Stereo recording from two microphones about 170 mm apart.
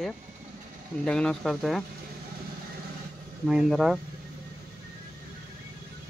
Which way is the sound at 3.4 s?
Centre (ahead or behind).